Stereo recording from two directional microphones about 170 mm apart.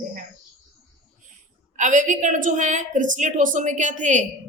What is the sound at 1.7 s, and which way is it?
A woman's voice, 45° right (ahead or behind).